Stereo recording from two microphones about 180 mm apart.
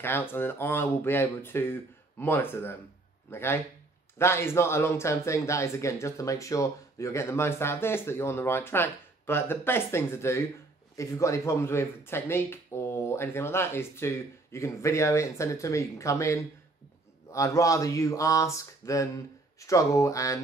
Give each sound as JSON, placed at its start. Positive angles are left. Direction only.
{"t": 0.0, "sound": "a man's voice", "side_deg": 10}